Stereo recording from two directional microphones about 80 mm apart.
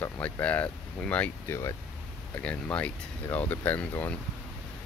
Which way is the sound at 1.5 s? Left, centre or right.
Left.